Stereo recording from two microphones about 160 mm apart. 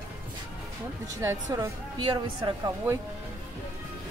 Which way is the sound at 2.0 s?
30° right (ahead or behind).